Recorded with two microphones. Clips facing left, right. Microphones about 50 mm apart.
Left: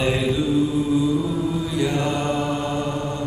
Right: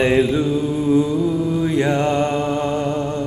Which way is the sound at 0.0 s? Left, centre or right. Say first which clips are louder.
Right 5 dB; right.